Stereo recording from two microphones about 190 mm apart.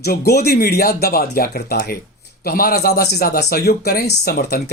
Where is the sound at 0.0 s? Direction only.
55° left (ahead or behind).